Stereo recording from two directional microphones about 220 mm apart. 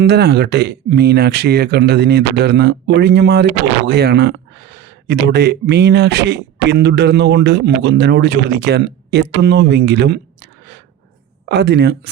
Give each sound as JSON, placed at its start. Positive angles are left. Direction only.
{"t": 0.0, "sound": "speech", "side_deg": -50}